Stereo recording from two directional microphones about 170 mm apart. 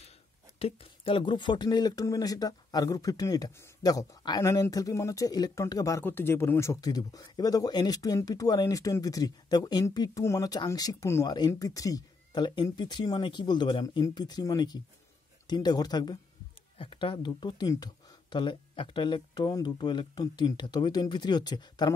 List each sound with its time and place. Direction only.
0.6 s speech: 35° left (ahead or behind)